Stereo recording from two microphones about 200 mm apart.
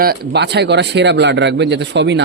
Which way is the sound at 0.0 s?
55° right (ahead or behind).